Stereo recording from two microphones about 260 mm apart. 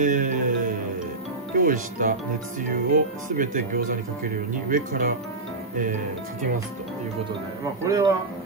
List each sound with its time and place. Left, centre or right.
0.0 s music: right
1.5 s speech: right
7.8 s a man's voice: centre